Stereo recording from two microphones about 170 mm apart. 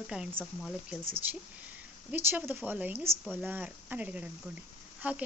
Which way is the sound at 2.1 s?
10° right (ahead or behind).